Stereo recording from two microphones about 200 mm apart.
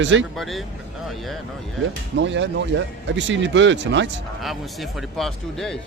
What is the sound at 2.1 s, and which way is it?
Speech, 65° right (ahead or behind).